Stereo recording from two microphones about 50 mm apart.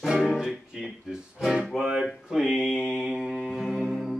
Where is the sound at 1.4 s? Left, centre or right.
Centre.